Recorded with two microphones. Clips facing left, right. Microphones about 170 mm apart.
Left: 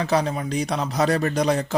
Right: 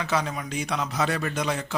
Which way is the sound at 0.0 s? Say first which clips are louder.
Left 5 dB; 35° left (ahead or behind).